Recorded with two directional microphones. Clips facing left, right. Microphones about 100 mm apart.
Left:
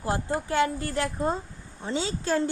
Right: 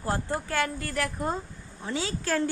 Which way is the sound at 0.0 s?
20° left (ahead or behind).